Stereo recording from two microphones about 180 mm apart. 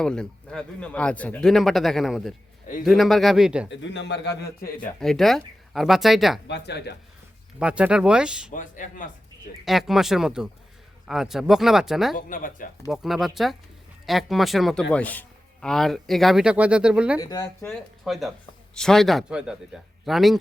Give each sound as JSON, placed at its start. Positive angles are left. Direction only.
{"t": 0.0, "sound": "a man's voice", "side_deg": 5}
{"t": 3.7, "sound": "speech", "side_deg": 75}
{"t": 4.9, "sound": "a man's voice", "side_deg": 0}
{"t": 6.5, "sound": "speech", "side_deg": 70}
{"t": 7.6, "sound": "a man's voice", "side_deg": -5}
{"t": 8.5, "sound": "speech", "side_deg": 45}
{"t": 9.6, "sound": "a man's voice", "side_deg": 0}
{"t": 12.1, "sound": "speech", "side_deg": 50}
{"t": 12.9, "sound": "a man's voice", "side_deg": 0}
{"t": 17.2, "sound": "speech", "side_deg": 20}
{"t": 17.7, "sound": "a man's voice", "side_deg": 0}